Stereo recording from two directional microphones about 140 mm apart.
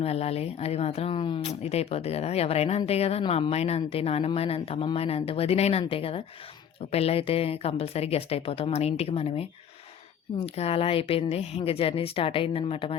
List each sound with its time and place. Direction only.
0.0 s speech: 45° left (ahead or behind)